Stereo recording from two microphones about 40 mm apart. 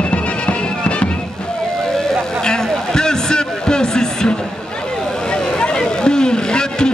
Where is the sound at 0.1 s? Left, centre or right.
Left.